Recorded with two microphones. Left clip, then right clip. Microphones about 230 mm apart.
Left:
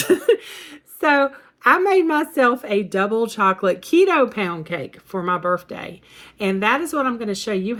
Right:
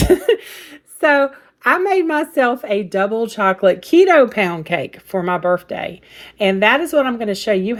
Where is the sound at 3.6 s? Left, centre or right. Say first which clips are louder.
Right 5 dB; centre.